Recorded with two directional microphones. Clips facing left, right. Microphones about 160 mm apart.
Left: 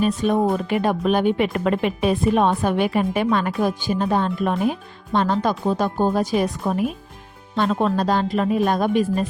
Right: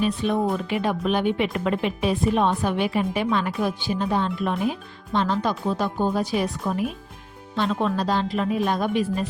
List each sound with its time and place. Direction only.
0.0 s speech: 45° left (ahead or behind)